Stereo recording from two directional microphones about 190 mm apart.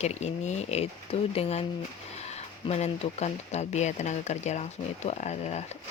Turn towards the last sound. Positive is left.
turn(degrees=35)  # may be behind; listen again after turning